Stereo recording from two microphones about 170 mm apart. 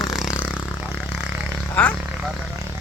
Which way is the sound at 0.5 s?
5° right (ahead or behind).